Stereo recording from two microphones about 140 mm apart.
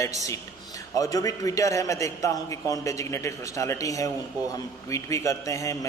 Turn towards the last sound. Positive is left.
turn(degrees=25)  # may be behind; listen again after turning